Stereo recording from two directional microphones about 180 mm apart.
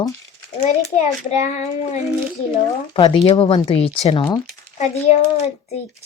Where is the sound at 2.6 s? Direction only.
25° left (ahead or behind).